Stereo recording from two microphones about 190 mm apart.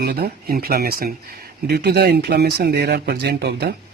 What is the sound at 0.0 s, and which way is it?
Speech, 55° right (ahead or behind).